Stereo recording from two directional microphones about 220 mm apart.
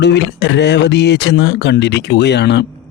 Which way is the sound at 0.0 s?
50° left (ahead or behind).